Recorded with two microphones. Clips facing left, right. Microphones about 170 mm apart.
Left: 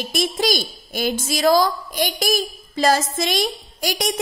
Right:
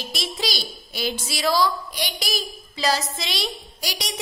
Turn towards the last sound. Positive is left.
turn(degrees=50)  # may be behind; listen again after turning